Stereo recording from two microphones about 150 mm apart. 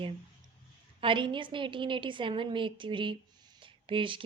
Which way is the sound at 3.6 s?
35° right (ahead or behind).